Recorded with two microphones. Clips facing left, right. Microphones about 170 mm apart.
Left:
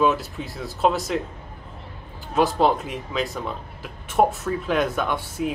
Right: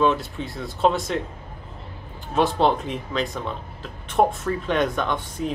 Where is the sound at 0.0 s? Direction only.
5° left (ahead or behind).